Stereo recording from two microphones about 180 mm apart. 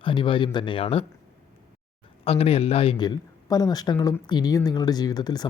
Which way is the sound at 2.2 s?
35° left (ahead or behind).